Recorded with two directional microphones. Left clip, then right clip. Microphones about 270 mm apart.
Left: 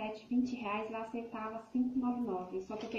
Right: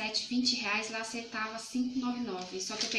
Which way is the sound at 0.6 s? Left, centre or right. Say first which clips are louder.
Right 5 dB; right.